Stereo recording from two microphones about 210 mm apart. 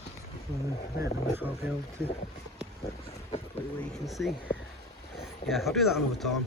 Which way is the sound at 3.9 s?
Centre (ahead or behind).